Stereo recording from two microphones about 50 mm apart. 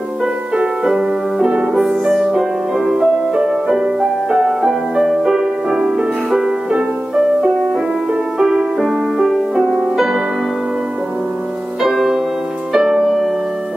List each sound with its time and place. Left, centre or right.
0.8 s music: centre
1.5 s music: centre
1.9 s music: centre
5.9 s music: centre
8.7 s music: centre
11.8 s music: centre